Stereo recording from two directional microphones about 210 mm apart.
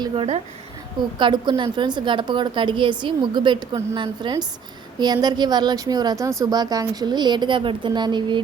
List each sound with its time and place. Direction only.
0.0 s a woman's voice: 25° right (ahead or behind)